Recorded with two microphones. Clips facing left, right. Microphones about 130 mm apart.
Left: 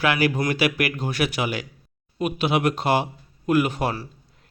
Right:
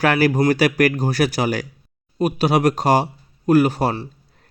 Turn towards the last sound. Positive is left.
turn(degrees=-35)  # may be behind; listen again after turning